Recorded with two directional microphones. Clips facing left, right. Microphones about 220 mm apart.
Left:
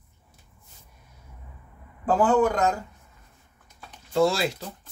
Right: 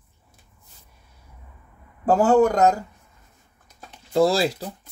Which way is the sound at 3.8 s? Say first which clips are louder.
Right 3 dB; 35° right (ahead or behind).